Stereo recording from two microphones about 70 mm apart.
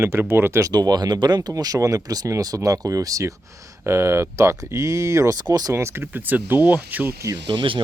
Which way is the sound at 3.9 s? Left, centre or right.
Right.